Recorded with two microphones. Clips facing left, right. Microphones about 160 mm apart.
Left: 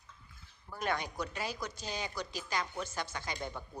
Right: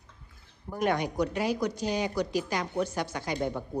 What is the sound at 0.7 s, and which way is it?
A woman's voice, 15° right (ahead or behind).